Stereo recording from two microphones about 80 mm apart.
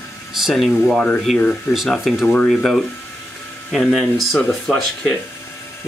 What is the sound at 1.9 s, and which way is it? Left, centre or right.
Speech, centre.